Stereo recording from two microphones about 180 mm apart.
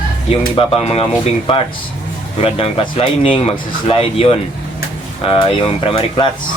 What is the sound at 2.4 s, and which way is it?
Speech, 35° left (ahead or behind).